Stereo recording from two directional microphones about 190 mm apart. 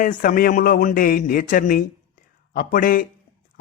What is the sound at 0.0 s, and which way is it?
Speech, 45° left (ahead or behind).